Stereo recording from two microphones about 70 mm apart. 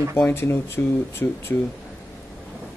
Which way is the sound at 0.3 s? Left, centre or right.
Left.